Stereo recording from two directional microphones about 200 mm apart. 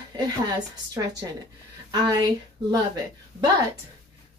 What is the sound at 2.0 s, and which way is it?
Speech, 20° right (ahead or behind).